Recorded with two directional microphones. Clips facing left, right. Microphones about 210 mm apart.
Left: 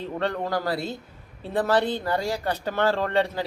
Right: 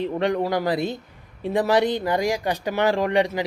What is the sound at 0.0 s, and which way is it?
A man's voice, 15° right (ahead or behind).